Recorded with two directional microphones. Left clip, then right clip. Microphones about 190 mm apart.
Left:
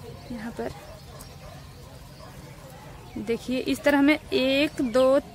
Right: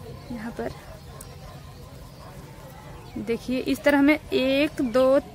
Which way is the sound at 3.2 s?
Centre (ahead or behind).